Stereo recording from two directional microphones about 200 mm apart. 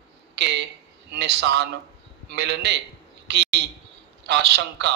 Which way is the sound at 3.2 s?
55° right (ahead or behind).